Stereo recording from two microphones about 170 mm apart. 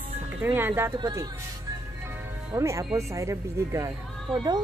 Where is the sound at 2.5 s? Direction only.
20° right (ahead or behind).